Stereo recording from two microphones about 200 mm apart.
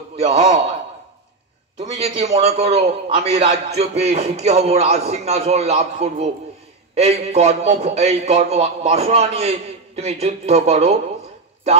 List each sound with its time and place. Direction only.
0.1 s a man's voice: 30° right (ahead or behind)
1.8 s a man's voice: 30° right (ahead or behind)